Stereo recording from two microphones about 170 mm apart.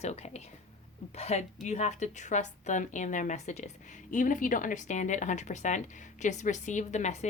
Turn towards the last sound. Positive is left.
turn(degrees=45)  # may be behind; listen again after turning